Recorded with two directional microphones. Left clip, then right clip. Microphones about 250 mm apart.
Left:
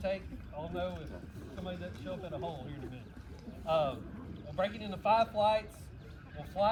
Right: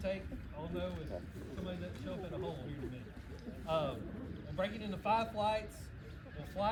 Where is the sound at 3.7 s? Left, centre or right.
Centre.